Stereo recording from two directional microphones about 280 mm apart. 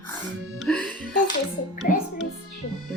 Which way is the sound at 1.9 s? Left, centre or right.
Left.